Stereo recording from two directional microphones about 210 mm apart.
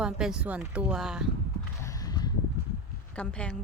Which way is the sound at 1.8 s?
15° left (ahead or behind).